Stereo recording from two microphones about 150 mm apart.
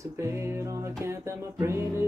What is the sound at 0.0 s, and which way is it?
Music, 20° right (ahead or behind).